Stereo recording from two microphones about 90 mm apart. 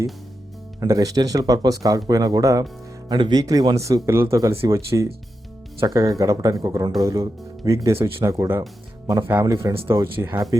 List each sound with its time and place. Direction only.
0.8 s speech: 40° right (ahead or behind)
3.1 s speech: 55° right (ahead or behind)
3.8 s speech: 35° right (ahead or behind)
9.5 s speech: 45° right (ahead or behind)
9.8 s speech: 35° right (ahead or behind)